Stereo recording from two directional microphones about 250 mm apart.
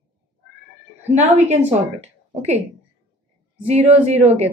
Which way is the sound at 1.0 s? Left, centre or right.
Right.